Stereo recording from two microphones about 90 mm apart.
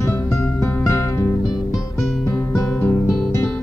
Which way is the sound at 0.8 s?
30° left (ahead or behind).